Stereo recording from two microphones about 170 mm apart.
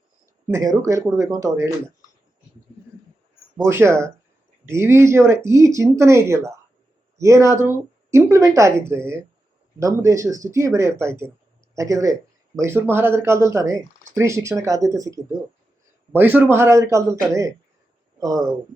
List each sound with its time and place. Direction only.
0.5 s speech: 20° right (ahead or behind)
3.6 s speech: 15° right (ahead or behind)